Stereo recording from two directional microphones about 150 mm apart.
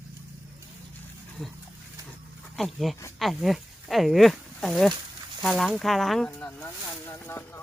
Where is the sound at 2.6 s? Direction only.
Centre (ahead or behind).